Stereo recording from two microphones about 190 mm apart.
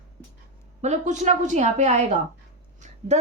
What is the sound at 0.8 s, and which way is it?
A woman's voice, 40° right (ahead or behind).